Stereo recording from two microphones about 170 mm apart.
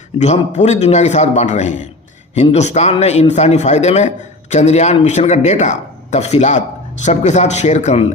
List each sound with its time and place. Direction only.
0.2 s a man's voice: 40° left (ahead or behind)